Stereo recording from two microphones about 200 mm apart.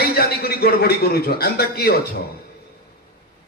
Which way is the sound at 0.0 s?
50° left (ahead or behind).